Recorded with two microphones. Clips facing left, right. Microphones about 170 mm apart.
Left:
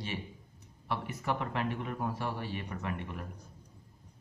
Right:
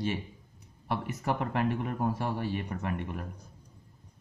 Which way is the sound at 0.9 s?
45° right (ahead or behind).